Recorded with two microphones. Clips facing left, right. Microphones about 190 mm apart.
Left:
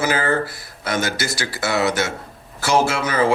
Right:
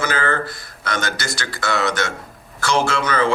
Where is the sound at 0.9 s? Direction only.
5° left (ahead or behind).